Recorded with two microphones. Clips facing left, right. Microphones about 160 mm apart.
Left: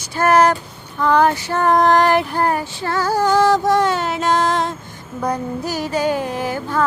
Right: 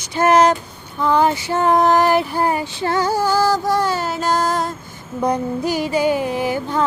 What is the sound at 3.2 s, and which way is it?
Female singing, 5° right (ahead or behind).